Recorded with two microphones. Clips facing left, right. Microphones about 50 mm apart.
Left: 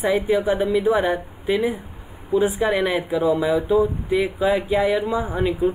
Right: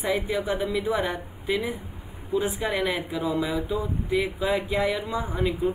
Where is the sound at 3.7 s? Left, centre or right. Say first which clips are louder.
Left 8 dB; centre.